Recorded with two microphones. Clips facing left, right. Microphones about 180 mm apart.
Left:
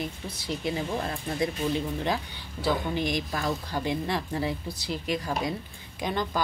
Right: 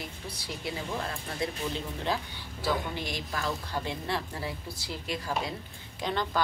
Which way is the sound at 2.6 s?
15° left (ahead or behind).